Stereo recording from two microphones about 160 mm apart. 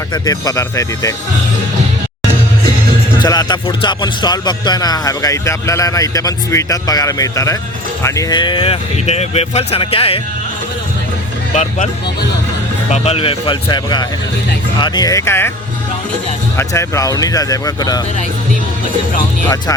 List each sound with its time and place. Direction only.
0.1 s speech: 25° left (ahead or behind)
3.2 s speech: 25° left (ahead or behind)
11.5 s speech: 45° left (ahead or behind)
12.9 s speech: 40° left (ahead or behind); by 15.5 s 15° left (ahead or behind)
16.6 s speech: 20° left (ahead or behind)